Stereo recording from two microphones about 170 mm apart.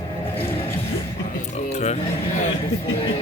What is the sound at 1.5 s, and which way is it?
Speech, 40° left (ahead or behind).